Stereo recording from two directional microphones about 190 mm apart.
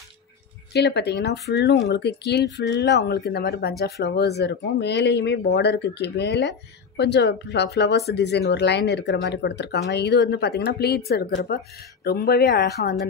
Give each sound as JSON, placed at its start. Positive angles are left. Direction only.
{"t": 0.7, "sound": "speech", "side_deg": 60}